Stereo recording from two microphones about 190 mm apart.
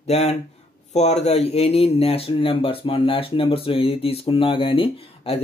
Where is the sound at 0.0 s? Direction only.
35° left (ahead or behind).